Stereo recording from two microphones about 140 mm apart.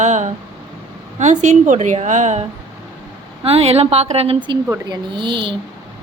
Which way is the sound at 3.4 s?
45° right (ahead or behind).